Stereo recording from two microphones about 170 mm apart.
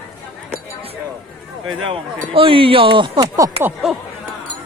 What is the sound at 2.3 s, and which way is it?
Speech, 30° right (ahead or behind).